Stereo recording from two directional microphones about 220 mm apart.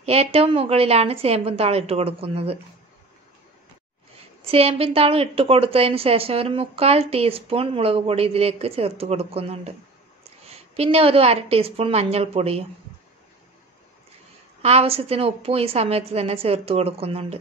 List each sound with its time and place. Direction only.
0.0 s a woman's voice: 25° right (ahead or behind)
4.5 s a woman's voice: 25° right (ahead or behind)
14.6 s a woman's voice: 25° right (ahead or behind)